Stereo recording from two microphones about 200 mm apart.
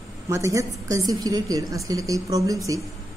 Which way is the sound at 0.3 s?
15° right (ahead or behind).